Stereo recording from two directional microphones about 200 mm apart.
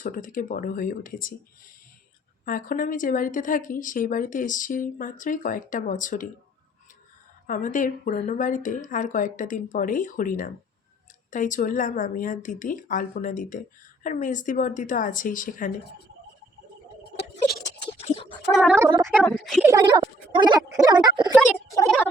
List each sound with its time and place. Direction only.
0.0 s speech: 45° left (ahead or behind)
2.4 s speech: 45° left (ahead or behind)
7.4 s speech: 40° left (ahead or behind)
17.8 s a sound: 30° left (ahead or behind)
18.5 s a woman's voice: centre (ahead or behind)
18.9 s speech: 20° right (ahead or behind)
19.2 s a woman's voice: 5° left (ahead or behind)
19.6 s speech: 20° right (ahead or behind)